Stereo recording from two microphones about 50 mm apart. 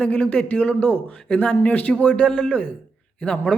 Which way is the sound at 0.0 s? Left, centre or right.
Left.